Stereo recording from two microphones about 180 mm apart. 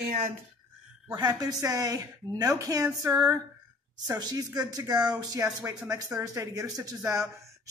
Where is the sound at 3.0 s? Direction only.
15° right (ahead or behind).